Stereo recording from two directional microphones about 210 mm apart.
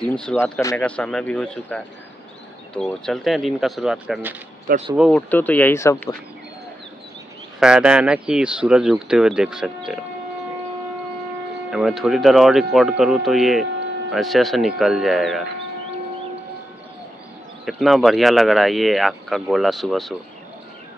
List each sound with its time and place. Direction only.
0.0 s speech: 5° left (ahead or behind)
4.7 s speech: 40° right (ahead or behind)
5.1 s speech: 10° left (ahead or behind)
7.6 s speech: 5° right (ahead or behind)
11.7 s speech: centre (ahead or behind)
17.6 s speech: centre (ahead or behind)